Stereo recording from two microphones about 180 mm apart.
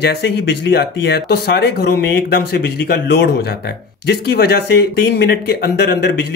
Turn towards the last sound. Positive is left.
turn(degrees=60)  # may be behind; listen again after turning